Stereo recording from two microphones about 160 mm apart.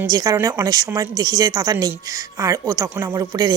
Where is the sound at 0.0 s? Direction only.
25° right (ahead or behind).